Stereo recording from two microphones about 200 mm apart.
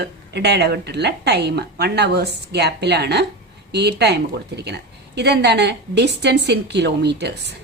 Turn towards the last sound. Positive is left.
turn(degrees=-55)  # may be behind; listen again after turning